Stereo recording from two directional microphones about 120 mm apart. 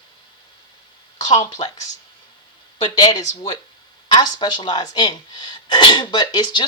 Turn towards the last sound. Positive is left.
turn(degrees=40)  # may be behind; listen again after turning